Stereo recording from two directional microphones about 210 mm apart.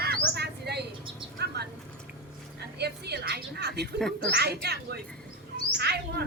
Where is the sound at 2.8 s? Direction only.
50° right (ahead or behind).